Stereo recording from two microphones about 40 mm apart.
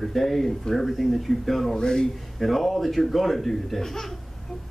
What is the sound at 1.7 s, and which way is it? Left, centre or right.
Speech, centre.